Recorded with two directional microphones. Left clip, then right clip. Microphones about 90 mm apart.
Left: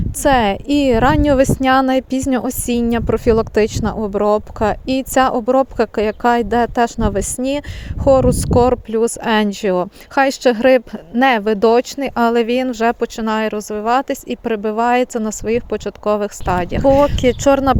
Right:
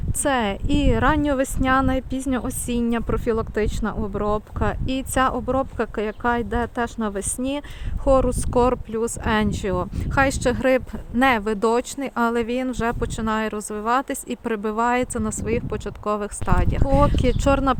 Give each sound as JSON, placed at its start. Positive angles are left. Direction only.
{"t": 0.2, "sound": "a woman's voice", "side_deg": 60}
{"t": 8.9, "sound": "speech", "side_deg": 65}